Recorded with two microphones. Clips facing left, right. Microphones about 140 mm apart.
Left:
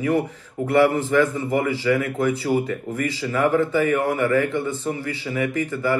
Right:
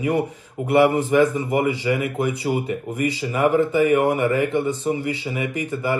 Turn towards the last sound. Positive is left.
turn(degrees=-15)  # may be behind; listen again after turning